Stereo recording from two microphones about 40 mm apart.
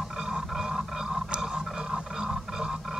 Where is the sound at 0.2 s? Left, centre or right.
Centre.